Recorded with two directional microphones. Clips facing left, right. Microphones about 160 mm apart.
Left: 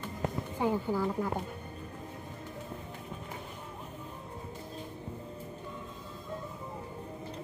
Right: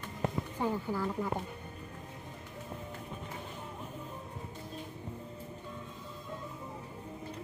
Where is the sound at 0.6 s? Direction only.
15° left (ahead or behind).